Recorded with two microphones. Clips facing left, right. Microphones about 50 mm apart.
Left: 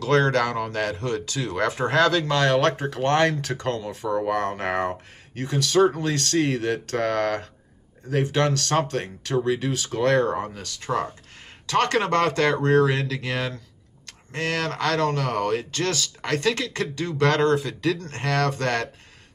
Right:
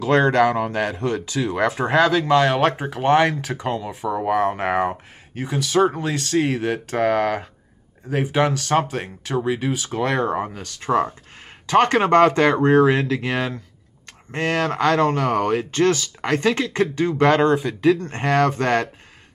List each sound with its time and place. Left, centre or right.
0.0 s speech: centre